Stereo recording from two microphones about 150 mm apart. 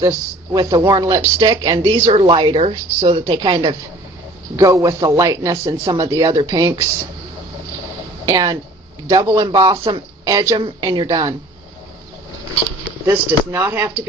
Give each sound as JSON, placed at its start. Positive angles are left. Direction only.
{"t": 0.0, "sound": "a man's voice", "side_deg": -20}
{"t": 4.5, "sound": "a man's voice", "side_deg": -20}
{"t": 8.3, "sound": "a man's voice", "side_deg": -25}
{"t": 10.2, "sound": "a man's voice", "side_deg": -20}
{"t": 13.1, "sound": "speech", "side_deg": -15}